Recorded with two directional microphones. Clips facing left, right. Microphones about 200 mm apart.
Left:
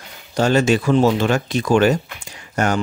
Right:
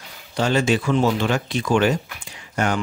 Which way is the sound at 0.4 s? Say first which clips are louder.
Left 4 dB; 45° left (ahead or behind).